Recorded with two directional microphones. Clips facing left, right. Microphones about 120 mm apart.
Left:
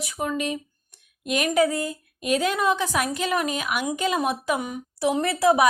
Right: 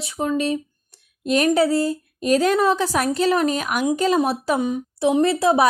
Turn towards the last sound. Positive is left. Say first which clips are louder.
# right 3 dB
turn(degrees=-30)  # may be behind; listen again after turning